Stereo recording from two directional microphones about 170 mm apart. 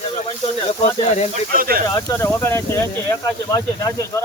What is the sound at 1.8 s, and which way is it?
Speech, 20° left (ahead or behind).